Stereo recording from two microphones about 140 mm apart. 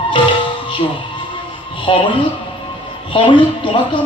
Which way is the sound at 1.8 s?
35° left (ahead or behind).